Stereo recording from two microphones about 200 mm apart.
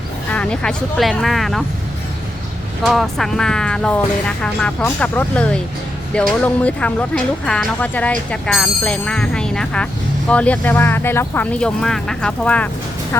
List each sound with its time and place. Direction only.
0.3 s speech: 5° left (ahead or behind)
2.8 s speech: centre (ahead or behind)